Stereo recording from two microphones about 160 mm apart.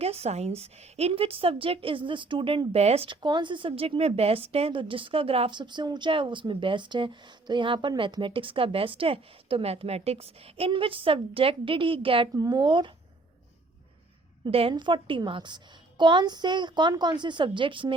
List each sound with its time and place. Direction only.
0.0 s a woman's voice: 40° right (ahead or behind)
14.4 s a woman's voice: 35° right (ahead or behind)